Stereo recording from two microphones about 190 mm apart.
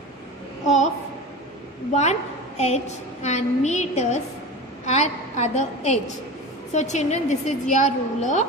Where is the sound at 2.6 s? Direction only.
35° left (ahead or behind).